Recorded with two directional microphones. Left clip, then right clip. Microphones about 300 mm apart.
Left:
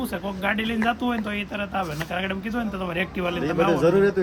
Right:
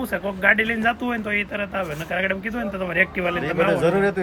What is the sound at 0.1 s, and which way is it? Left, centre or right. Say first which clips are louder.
Speech: right 11 dB; centre.